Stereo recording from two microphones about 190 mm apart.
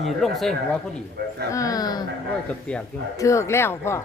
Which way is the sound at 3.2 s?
15° left (ahead or behind).